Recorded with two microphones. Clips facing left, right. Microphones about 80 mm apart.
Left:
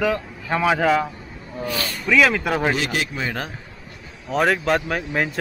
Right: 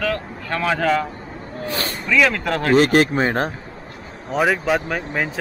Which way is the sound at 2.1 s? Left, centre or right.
Centre.